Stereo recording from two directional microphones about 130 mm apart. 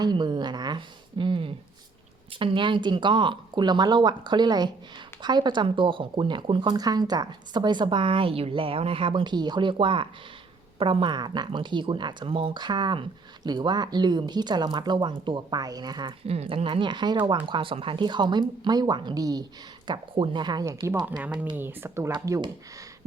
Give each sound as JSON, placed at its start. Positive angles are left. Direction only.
{"t": 0.0, "sound": "a sound", "side_deg": -35}
{"t": 2.4, "sound": "speech", "side_deg": -40}
{"t": 16.2, "sound": "speech", "side_deg": -50}
{"t": 21.5, "sound": "speech", "side_deg": -15}